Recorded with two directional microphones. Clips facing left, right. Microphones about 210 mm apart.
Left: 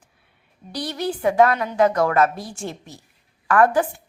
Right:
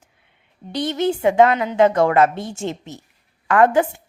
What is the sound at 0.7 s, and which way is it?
A woman's voice, 25° right (ahead or behind).